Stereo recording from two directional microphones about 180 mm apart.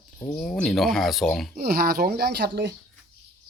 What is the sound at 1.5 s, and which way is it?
Speech, 60° right (ahead or behind).